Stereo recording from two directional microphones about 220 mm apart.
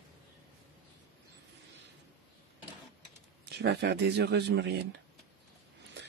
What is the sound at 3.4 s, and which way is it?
Speech, 50° right (ahead or behind).